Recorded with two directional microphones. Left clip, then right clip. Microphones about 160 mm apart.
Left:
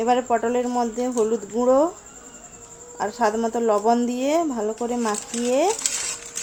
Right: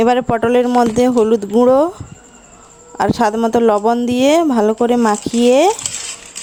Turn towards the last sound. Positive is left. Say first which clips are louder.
# right 10 dB
turn(degrees=-90)